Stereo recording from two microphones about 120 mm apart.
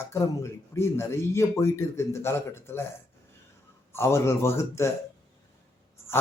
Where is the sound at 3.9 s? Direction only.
20° left (ahead or behind).